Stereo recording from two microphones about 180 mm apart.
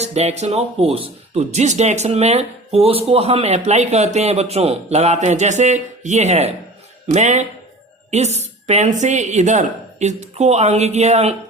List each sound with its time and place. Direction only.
0.0 s speech: 35° right (ahead or behind)